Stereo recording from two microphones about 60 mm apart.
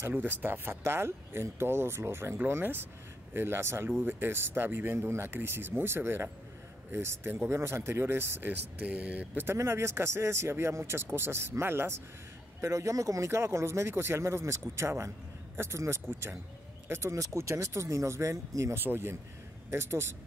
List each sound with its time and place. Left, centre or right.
0.2 s speech: right
9.6 s speech: right
12.5 s speech: right
16.9 s speech: right
18.8 s speech: right